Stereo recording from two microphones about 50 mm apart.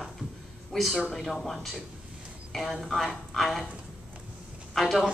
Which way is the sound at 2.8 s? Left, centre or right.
Centre.